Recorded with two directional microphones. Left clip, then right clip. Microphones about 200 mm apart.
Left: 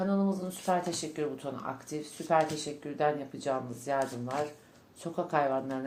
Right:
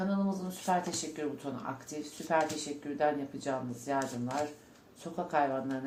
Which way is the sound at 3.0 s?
45° left (ahead or behind).